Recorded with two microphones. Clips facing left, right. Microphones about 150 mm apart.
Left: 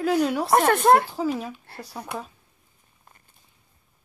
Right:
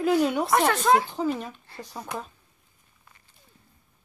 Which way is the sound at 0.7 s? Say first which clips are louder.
Left 4 dB; 55° left (ahead or behind).